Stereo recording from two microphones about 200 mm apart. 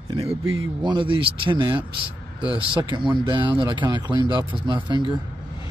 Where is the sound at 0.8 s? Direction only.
25° right (ahead or behind).